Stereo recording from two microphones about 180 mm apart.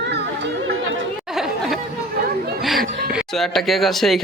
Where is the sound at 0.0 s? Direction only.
75° right (ahead or behind).